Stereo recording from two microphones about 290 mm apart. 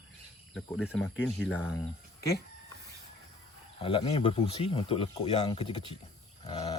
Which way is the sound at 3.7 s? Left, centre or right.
Centre.